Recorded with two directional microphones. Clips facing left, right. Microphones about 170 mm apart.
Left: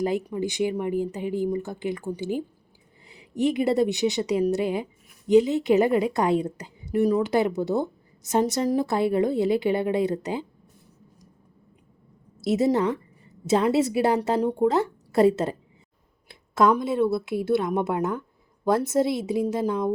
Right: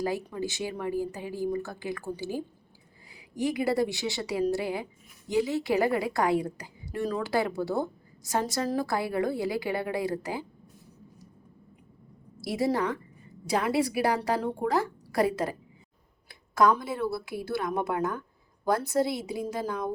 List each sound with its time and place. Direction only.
0.0 s a woman's voice: 20° left (ahead or behind)
12.4 s a woman's voice: 25° left (ahead or behind)